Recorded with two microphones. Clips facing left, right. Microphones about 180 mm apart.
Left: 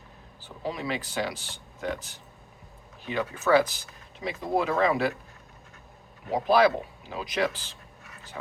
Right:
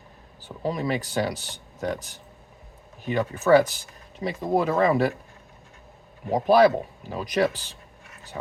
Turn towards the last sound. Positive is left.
turn(degrees=-45)  # may be behind; listen again after turning